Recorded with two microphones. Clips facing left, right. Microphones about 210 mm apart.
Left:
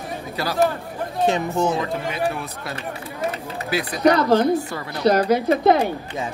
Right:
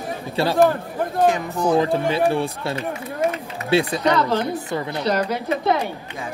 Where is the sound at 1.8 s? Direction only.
30° right (ahead or behind).